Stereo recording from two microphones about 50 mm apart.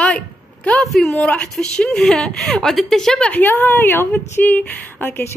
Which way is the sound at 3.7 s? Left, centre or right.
Left.